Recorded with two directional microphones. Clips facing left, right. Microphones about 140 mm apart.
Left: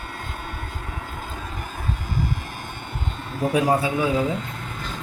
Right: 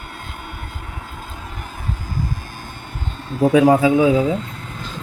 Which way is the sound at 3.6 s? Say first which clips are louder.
Right 8 dB; 90° right.